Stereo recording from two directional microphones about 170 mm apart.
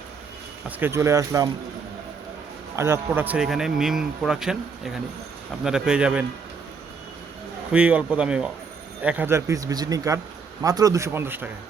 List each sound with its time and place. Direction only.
0.8 s a man's voice: 15° right (ahead or behind)
2.7 s speech: 15° right (ahead or behind)
7.7 s a man's voice: 5° right (ahead or behind)